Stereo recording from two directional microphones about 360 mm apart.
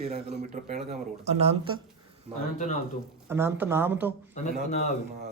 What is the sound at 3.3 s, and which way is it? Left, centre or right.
Speech, centre.